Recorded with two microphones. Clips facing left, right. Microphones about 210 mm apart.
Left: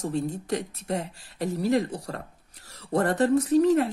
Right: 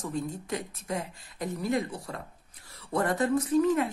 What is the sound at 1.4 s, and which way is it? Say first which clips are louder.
Speech: left 5 dB; 35° left (ahead or behind).